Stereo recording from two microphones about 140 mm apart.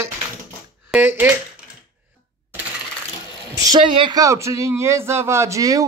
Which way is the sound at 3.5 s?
30° right (ahead or behind).